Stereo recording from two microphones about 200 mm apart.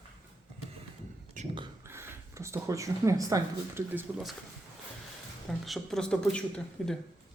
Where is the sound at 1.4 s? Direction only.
40° right (ahead or behind).